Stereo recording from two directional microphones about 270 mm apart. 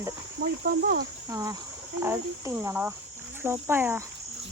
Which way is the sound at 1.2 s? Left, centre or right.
Centre.